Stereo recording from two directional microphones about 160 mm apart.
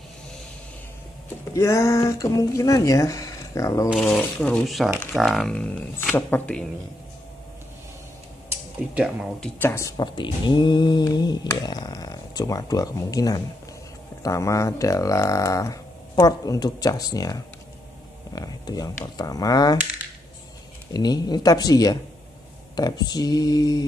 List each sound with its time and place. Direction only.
1.5 s speech: 20° left (ahead or behind)
3.9 s speech: 10° left (ahead or behind)
8.9 s speech: 5° right (ahead or behind)
9.4 s speech: 15° left (ahead or behind)
20.9 s speech: 25° left (ahead or behind)